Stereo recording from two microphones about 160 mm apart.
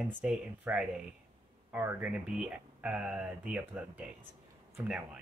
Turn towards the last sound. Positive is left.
turn(degrees=-5)  # may be behind; listen again after turning